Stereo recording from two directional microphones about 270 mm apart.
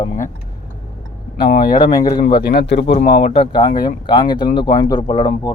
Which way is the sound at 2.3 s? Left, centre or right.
Left.